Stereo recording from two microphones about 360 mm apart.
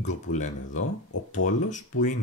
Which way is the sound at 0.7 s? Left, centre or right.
Left.